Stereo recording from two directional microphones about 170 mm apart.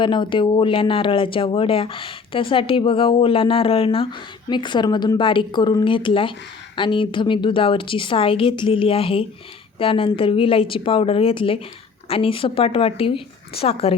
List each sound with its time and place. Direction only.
0.0 s speech: 30° left (ahead or behind)